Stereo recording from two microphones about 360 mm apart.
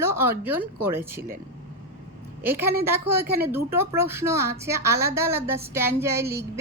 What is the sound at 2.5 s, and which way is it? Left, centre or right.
Speech, centre.